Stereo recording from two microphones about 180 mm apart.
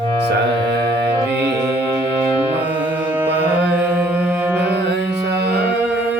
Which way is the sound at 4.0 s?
5° right (ahead or behind).